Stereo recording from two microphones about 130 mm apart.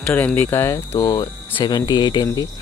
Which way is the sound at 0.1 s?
15° left (ahead or behind).